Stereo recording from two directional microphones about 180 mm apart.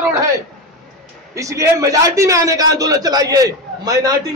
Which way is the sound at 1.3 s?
15° right (ahead or behind).